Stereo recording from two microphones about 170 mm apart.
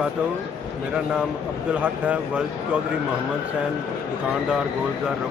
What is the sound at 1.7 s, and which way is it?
Speech, 5° right (ahead or behind).